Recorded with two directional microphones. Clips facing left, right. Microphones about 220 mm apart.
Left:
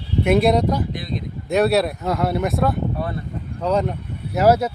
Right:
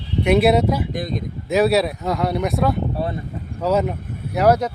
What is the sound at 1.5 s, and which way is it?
Speech, centre (ahead or behind).